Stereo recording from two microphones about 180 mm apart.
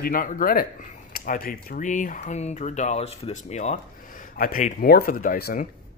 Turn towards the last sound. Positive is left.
turn(degrees=55)  # may be behind; listen again after turning